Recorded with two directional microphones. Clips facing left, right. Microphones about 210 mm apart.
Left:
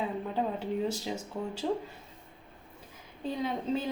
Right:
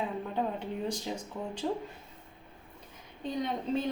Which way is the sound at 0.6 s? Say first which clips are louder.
Left 3 dB; 5° left (ahead or behind).